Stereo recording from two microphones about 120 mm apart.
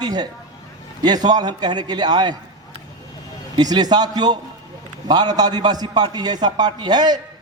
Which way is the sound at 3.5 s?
35° right (ahead or behind).